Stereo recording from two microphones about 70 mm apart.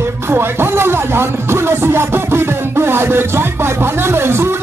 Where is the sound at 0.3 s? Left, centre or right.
Right.